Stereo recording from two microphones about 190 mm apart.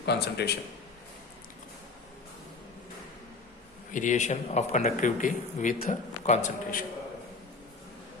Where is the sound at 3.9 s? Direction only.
40° left (ahead or behind).